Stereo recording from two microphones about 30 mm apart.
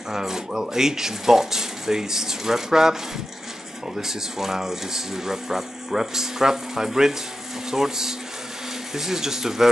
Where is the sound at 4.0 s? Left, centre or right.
Centre.